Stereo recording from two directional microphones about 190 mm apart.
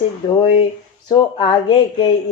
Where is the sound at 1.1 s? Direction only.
25° left (ahead or behind).